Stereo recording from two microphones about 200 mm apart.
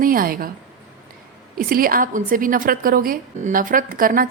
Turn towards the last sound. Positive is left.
turn(degrees=-45)  # may be behind; listen again after turning